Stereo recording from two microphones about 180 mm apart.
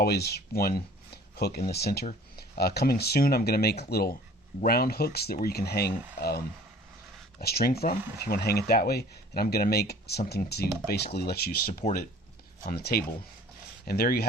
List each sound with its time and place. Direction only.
0.0 s speech: 60° left (ahead or behind)
11.8 s speech: 40° left (ahead or behind)
12.6 s speech: 55° left (ahead or behind)